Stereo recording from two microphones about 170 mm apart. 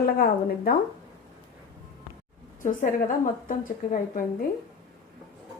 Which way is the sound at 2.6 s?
50° left (ahead or behind).